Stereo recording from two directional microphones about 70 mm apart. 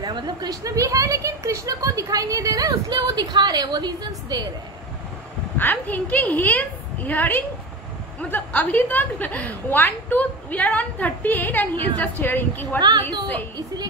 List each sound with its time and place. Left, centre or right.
0.0 s speech: right
5.6 s a woman's voice: left